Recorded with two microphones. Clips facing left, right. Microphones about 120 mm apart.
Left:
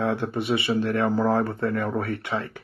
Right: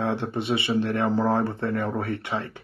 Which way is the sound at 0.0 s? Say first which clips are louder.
Left 1 dB; 25° right (ahead or behind).